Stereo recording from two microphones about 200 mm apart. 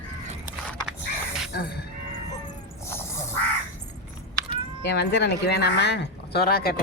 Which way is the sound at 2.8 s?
15° left (ahead or behind).